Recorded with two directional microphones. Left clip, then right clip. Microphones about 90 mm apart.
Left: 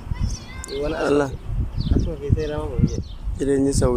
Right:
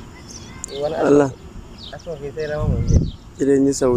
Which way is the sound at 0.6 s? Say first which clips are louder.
Left 1 dB; 20° right (ahead or behind).